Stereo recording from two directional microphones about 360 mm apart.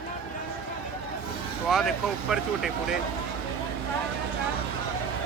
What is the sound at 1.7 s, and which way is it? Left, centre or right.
Speech, centre.